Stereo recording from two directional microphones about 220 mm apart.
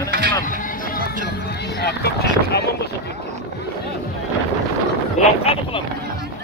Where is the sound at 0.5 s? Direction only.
40° left (ahead or behind).